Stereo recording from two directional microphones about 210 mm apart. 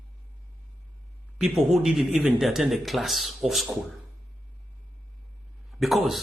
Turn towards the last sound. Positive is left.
turn(degrees=0)  # may be behind; listen again after turning